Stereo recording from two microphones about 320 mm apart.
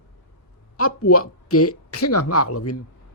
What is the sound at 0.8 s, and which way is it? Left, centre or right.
Speech, left.